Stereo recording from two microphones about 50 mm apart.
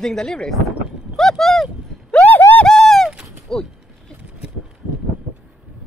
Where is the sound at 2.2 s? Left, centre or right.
Left.